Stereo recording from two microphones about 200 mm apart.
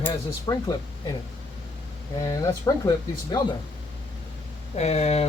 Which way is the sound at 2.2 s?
15° left (ahead or behind).